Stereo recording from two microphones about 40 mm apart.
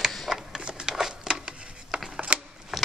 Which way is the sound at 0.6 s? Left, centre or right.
Centre.